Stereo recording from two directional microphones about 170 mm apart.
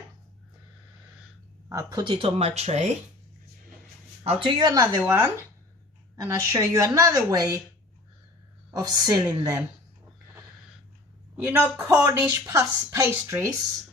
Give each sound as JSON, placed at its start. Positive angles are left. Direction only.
{"t": 1.7, "sound": "speech", "side_deg": -20}
{"t": 4.2, "sound": "a woman's voice", "side_deg": -35}
{"t": 4.9, "sound": "a woman's voice", "side_deg": -10}
{"t": 8.7, "sound": "a woman's voice", "side_deg": -20}
{"t": 11.3, "sound": "a woman's voice", "side_deg": -10}